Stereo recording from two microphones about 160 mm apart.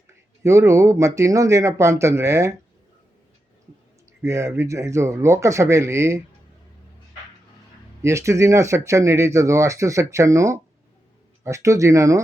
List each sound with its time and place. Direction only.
0.1 s speech: 20° right (ahead or behind)
4.2 s speech: 15° right (ahead or behind)
8.0 s speech: 20° right (ahead or behind)